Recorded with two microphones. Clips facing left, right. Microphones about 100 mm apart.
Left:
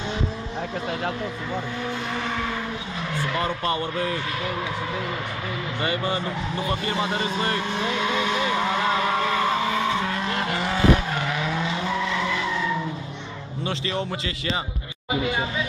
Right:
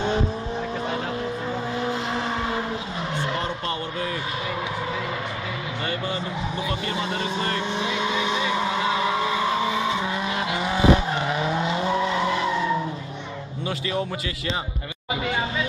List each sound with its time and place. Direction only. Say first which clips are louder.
1.8 s vehicle: right 3 dB; 30° right (ahead or behind)
6.9 s speech: left 2 dB; 15° left (ahead or behind)
7.7 s vehicle: even; 20° right (ahead or behind)
11.1 s vehicle: right 2 dB; 25° right (ahead or behind)
13.7 s a man's voice: right 1 dB; 5° right (ahead or behind)